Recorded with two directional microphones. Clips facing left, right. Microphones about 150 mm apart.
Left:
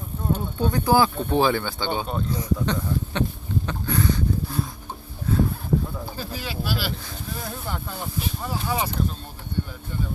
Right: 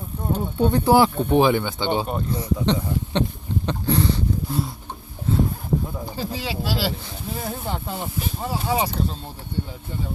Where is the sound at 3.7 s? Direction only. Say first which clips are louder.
Right 4 dB; 30° right (ahead or behind).